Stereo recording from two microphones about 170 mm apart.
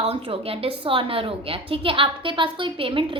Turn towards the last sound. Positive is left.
turn(degrees=-30)  # may be behind; listen again after turning